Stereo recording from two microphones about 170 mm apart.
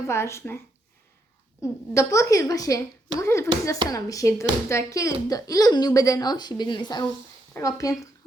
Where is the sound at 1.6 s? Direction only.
20° left (ahead or behind).